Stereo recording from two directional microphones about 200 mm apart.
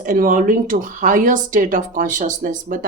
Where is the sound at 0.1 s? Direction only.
40° right (ahead or behind).